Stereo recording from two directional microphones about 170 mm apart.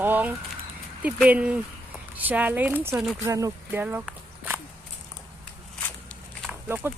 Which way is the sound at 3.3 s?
20° right (ahead or behind).